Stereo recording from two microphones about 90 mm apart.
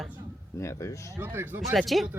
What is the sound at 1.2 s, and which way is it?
Speech, 25° right (ahead or behind).